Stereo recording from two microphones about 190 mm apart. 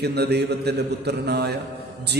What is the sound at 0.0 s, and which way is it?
A man's voice, 60° right (ahead or behind).